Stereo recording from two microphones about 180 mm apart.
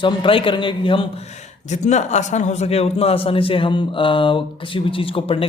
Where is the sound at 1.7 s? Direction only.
40° left (ahead or behind).